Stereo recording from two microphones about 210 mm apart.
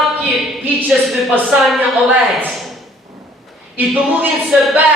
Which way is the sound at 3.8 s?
5° right (ahead or behind).